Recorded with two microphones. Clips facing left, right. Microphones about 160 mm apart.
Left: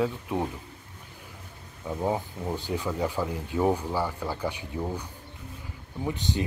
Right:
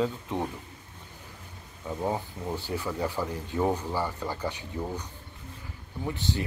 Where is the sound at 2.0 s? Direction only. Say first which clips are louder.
Left 2 dB; 10° left (ahead or behind).